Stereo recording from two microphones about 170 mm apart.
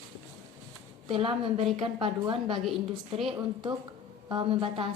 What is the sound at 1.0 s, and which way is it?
A woman's voice, 30° right (ahead or behind).